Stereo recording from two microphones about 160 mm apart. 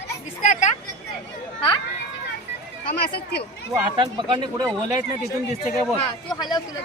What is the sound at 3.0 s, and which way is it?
Speech, 80° left.